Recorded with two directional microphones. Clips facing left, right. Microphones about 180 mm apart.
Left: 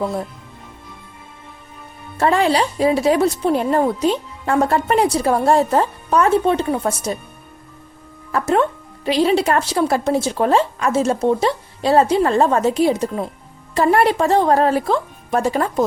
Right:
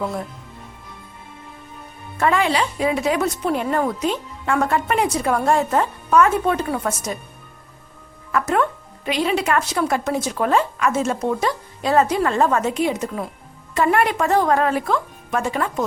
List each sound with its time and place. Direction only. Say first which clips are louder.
2.1 s speech: left 3 dB; 35° left (ahead or behind)
8.3 s speech: left 3 dB; 30° left (ahead or behind)